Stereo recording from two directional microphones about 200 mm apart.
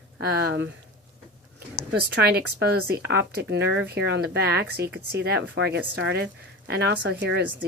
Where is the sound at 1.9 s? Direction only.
55° right (ahead or behind).